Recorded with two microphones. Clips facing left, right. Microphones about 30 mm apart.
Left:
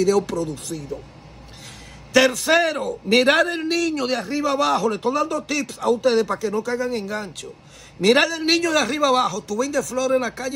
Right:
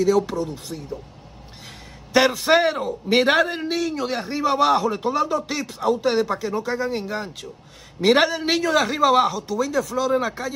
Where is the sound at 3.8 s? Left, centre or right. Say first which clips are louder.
Left 2 dB; left.